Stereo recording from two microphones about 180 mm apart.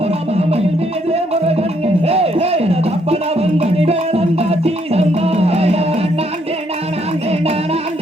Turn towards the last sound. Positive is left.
turn(degrees=-35)  # may be behind; listen again after turning